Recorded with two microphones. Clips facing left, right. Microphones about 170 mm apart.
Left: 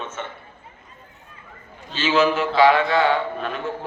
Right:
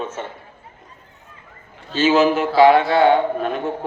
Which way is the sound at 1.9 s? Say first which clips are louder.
Right 4 dB; 45° right (ahead or behind).